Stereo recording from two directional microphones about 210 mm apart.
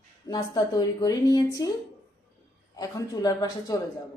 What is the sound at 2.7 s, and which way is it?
A woman's voice, 15° left (ahead or behind).